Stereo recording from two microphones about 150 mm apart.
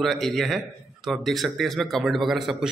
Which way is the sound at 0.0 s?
Centre (ahead or behind).